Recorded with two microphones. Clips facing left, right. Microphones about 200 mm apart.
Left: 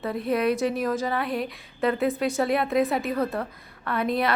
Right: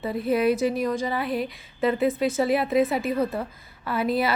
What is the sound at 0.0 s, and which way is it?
A woman's voice, centre (ahead or behind).